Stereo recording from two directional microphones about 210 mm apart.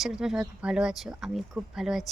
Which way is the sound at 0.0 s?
Centre (ahead or behind).